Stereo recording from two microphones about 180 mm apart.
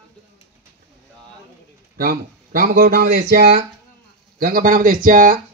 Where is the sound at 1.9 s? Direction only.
55° right (ahead or behind).